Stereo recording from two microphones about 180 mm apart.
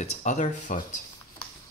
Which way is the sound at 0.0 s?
40° left (ahead or behind).